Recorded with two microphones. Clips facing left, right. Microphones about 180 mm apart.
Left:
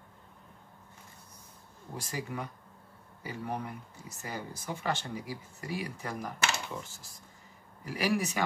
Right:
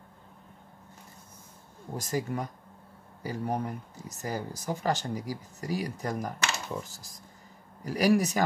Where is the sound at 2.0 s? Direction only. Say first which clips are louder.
Right 6 dB; 40° right (ahead or behind).